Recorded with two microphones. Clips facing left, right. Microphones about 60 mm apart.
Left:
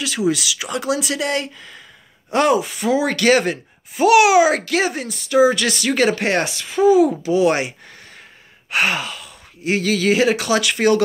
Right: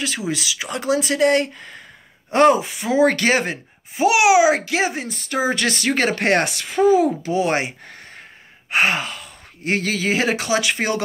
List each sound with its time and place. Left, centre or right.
0.3 s speech: right
2.6 s speech: centre
3.0 s speech: right
3.3 s speech: right
5.0 s speech: right
9.9 s speech: right